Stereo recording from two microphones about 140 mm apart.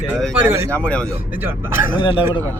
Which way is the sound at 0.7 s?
10° left (ahead or behind).